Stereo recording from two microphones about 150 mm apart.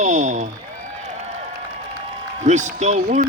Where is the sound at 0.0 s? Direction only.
55° right (ahead or behind).